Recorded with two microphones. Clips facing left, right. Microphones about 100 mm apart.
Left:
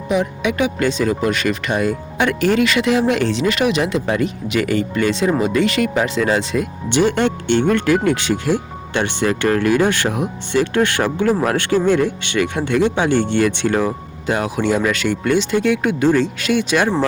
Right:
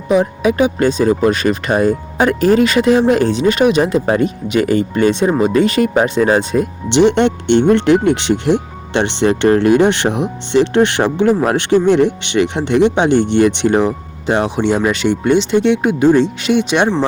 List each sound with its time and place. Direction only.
0.1 s speech: 35° right (ahead or behind)
6.8 s speech: 20° right (ahead or behind)